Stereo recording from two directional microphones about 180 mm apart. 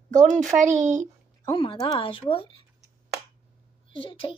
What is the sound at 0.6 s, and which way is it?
Speech, 45° right (ahead or behind).